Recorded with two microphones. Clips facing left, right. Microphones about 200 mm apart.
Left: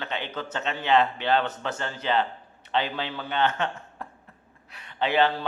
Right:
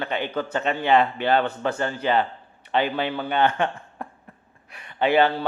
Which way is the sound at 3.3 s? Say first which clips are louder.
Right 3 dB; 10° right (ahead or behind).